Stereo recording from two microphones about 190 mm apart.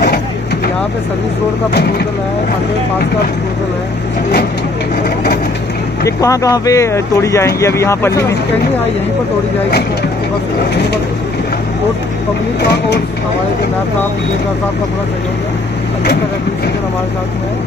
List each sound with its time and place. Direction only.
6.0 s speech: 15° left (ahead or behind)